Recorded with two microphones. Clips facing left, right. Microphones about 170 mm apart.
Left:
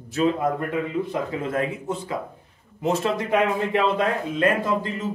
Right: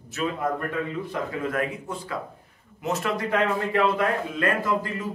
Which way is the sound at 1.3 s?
25° left (ahead or behind).